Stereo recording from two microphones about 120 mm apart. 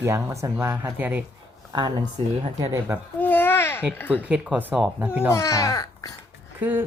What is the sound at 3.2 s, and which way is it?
Babbling, 15° left (ahead or behind).